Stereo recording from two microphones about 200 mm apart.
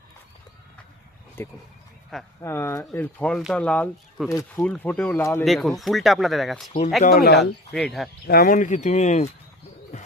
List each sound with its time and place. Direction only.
1.4 s speech: 10° left (ahead or behind)
4.3 s speech: 15° left (ahead or behind); by 6.7 s centre (ahead or behind)
7.0 s speech: 50° left (ahead or behind)
7.7 s speech: centre (ahead or behind)
8.3 s speech: 50° left (ahead or behind)